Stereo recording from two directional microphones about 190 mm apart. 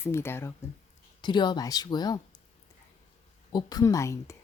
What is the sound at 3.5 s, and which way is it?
Speech, 20° left (ahead or behind).